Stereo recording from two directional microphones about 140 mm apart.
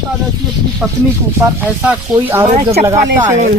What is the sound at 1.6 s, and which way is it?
Speech, 10° right (ahead or behind).